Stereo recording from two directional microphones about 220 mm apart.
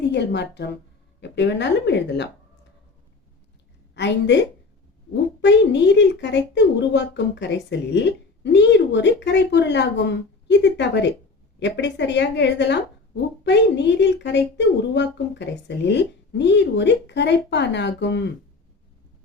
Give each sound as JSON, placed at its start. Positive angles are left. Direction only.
{"t": 0.0, "sound": "speech", "side_deg": 50}
{"t": 3.9, "sound": "a woman's voice", "side_deg": 50}
{"t": 5.4, "sound": "speech", "side_deg": 55}